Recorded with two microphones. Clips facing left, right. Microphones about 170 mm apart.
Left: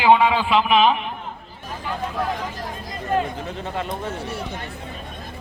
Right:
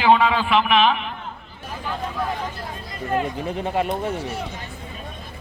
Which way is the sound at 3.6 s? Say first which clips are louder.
Right 6 dB; 15° right (ahead or behind).